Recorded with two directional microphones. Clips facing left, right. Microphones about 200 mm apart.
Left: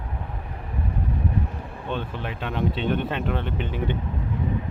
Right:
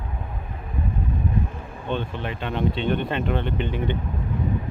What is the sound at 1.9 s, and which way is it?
Speech, 5° left (ahead or behind).